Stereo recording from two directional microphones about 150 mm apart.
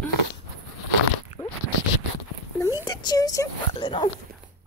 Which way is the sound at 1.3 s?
55° left (ahead or behind).